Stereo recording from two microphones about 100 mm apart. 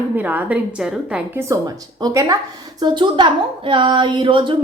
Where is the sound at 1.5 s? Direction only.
30° right (ahead or behind).